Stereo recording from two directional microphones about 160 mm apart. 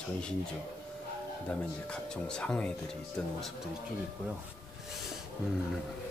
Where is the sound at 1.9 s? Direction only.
5° left (ahead or behind).